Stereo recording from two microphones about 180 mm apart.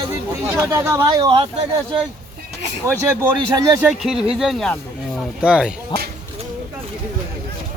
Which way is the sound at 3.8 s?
Centre (ahead or behind).